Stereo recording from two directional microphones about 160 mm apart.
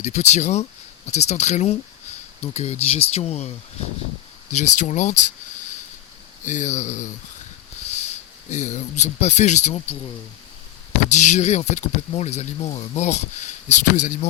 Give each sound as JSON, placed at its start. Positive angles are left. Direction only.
{"t": 0.0, "sound": "speech", "side_deg": 45}
{"t": 4.5, "sound": "speech", "side_deg": 45}
{"t": 6.4, "sound": "speech", "side_deg": 50}
{"t": 11.1, "sound": "speech", "side_deg": 50}